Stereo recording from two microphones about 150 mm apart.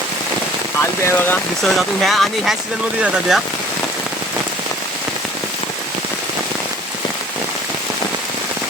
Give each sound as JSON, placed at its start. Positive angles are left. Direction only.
{"t": 0.8, "sound": "speech", "side_deg": 15}
{"t": 1.6, "sound": "speech", "side_deg": 0}